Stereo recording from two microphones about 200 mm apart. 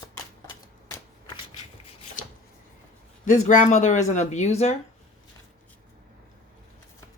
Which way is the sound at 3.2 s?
35° left (ahead or behind).